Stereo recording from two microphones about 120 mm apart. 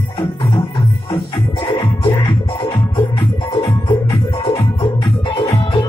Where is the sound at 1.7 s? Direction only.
45° left (ahead or behind).